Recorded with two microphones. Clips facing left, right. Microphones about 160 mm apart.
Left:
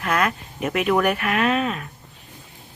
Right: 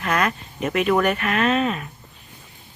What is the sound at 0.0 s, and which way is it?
Speech, 5° left (ahead or behind).